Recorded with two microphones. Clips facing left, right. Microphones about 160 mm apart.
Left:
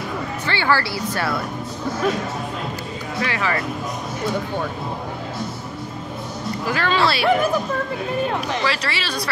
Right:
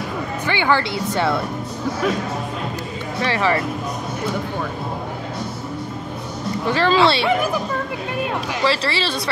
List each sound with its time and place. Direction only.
0.5 s speech: 20° right (ahead or behind)
3.2 s speech: 30° right (ahead or behind)
6.7 s speech: 30° right (ahead or behind)
8.6 s speech: 30° right (ahead or behind)